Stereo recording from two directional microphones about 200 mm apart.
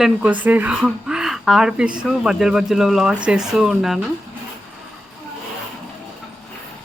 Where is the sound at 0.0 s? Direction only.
5° right (ahead or behind).